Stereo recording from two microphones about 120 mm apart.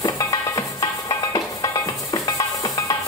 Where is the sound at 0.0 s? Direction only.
30° left (ahead or behind).